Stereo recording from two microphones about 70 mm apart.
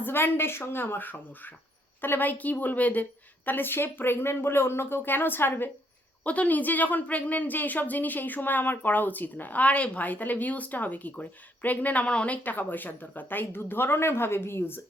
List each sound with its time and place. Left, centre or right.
0.0 s a woman's voice: left
6.2 s speech: left